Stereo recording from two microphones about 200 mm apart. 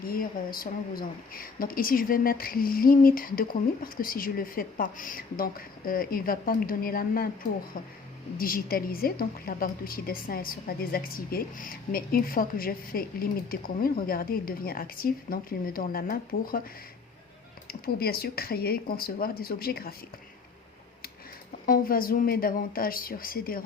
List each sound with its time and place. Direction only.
0.0 s a woman's voice: 45° left (ahead or behind)
8.4 s a woman's voice: 45° left (ahead or behind)
17.7 s a woman's voice: 50° left (ahead or behind)
21.7 s a woman's voice: 45° left (ahead or behind)